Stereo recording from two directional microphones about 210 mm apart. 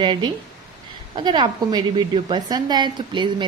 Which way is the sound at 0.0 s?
20° right (ahead or behind).